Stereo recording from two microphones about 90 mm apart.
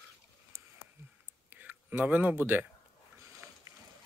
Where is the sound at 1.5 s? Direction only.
20° right (ahead or behind).